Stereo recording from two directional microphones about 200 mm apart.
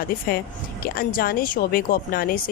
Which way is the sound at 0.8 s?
45° left (ahead or behind).